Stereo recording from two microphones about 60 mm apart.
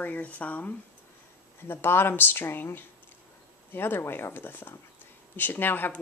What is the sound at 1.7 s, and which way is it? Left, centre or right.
Speech, left.